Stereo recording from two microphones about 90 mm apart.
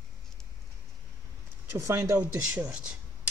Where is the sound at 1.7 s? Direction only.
35° right (ahead or behind).